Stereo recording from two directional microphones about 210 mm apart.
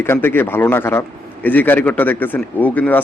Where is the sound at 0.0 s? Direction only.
10° left (ahead or behind).